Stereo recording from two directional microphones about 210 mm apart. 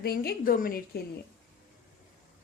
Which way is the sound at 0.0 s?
45° left (ahead or behind).